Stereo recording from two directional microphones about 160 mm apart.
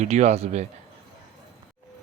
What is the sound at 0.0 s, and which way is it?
Speech, 45° right (ahead or behind).